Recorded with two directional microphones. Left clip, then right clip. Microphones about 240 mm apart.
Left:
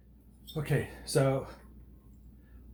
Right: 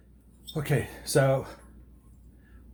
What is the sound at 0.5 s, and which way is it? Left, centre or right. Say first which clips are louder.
Speech: right 4 dB; right.